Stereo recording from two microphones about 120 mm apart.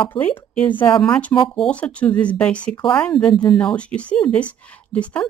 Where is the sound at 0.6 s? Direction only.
15° left (ahead or behind).